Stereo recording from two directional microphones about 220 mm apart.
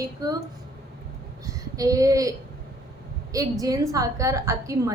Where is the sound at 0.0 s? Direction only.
15° right (ahead or behind).